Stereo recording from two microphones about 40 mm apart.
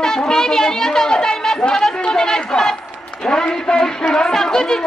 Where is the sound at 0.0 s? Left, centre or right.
Centre.